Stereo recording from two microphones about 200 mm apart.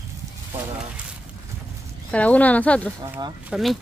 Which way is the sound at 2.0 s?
5° left (ahead or behind).